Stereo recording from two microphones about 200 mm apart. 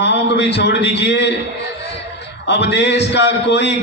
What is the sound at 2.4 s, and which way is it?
A man's voice, 60° left (ahead or behind).